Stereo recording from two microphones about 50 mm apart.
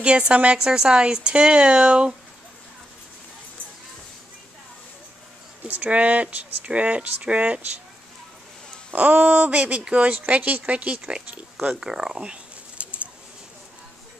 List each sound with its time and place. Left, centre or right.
0.0 s speech: right
5.7 s speech: right
8.9 s speech: right; by 12.2 s centre
12.2 s a sound: right